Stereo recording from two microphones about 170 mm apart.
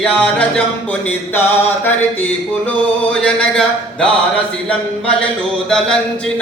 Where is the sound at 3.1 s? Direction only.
5° left (ahead or behind).